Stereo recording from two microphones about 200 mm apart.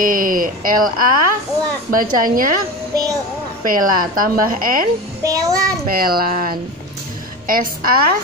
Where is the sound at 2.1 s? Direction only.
45° right (ahead or behind).